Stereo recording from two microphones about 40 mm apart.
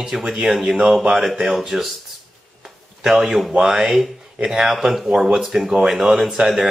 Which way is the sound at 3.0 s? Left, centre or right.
Centre.